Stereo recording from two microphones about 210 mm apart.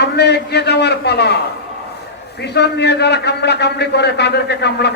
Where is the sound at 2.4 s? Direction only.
50° left (ahead or behind).